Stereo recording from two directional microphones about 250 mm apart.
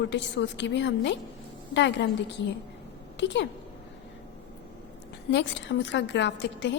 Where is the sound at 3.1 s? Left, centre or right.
Left.